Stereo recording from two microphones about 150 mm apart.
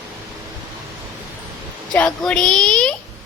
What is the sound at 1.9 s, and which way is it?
Child singing, 5° left (ahead or behind).